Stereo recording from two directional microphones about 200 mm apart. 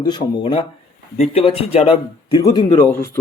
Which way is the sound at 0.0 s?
20° left (ahead or behind).